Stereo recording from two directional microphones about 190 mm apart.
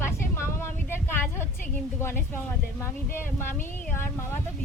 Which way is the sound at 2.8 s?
10° left (ahead or behind).